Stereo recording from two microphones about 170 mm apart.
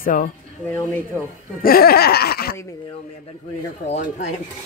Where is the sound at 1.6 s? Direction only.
60° left (ahead or behind).